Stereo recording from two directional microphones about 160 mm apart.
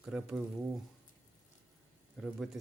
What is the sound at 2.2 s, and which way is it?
Speech, centre (ahead or behind).